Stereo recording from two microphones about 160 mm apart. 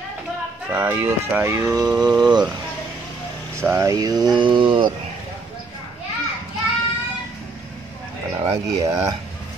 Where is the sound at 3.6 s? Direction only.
15° right (ahead or behind).